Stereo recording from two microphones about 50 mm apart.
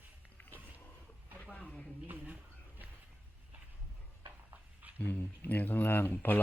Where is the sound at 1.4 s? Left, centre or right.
Left.